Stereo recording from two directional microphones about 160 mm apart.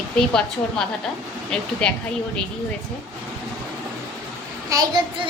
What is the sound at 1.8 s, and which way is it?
Speech, 5° left (ahead or behind).